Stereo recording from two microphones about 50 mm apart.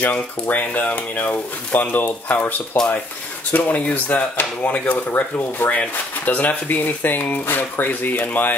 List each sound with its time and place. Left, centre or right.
0.0 s speech: left
6.4 s speech: left